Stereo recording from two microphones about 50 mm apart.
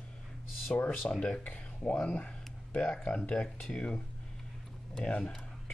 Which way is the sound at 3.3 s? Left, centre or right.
Centre.